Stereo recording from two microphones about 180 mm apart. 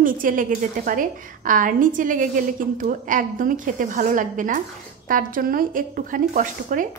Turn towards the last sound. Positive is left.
turn(degrees=-45)  # may be behind; listen again after turning